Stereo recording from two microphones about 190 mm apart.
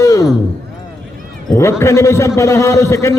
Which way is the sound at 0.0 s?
15° left (ahead or behind).